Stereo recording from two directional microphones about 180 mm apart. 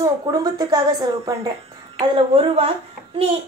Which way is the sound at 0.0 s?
20° right (ahead or behind).